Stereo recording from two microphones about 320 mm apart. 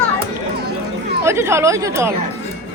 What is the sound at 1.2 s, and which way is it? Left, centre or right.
Speech, centre.